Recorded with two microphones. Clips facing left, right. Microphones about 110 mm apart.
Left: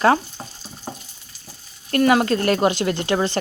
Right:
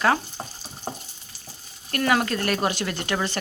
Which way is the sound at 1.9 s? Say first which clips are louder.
Left 6 dB; 25° left (ahead or behind).